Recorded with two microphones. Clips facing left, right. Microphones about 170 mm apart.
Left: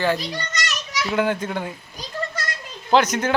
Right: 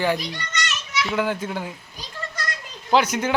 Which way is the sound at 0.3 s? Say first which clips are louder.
Left 2 dB; 40° left (ahead or behind).